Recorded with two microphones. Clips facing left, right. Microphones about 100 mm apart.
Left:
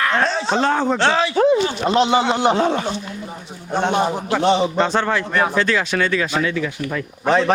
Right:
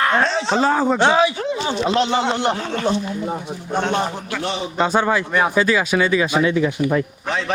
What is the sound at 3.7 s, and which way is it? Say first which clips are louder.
Speech: left 2 dB; 15° left (ahead or behind).